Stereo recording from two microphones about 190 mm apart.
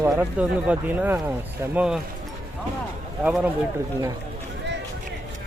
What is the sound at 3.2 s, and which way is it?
Speech, 5° right (ahead or behind).